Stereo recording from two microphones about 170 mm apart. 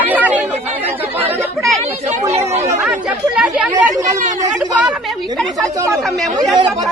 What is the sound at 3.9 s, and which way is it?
Speech, 45° right (ahead or behind).